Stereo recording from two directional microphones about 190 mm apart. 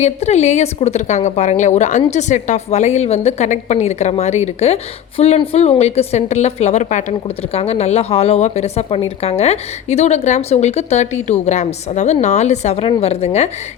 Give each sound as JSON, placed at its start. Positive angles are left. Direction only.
{"t": 0.0, "sound": "a woman's voice", "side_deg": 35}